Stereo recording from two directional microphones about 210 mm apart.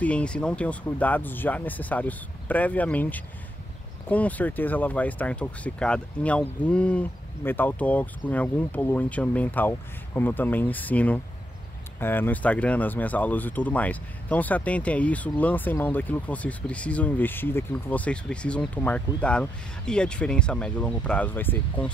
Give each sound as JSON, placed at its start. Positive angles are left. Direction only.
{"t": 0.0, "sound": "speech", "side_deg": 5}